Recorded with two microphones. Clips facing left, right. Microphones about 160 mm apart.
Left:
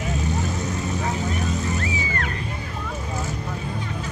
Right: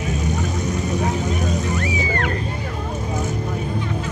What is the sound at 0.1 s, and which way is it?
Vehicle, 20° right (ahead or behind).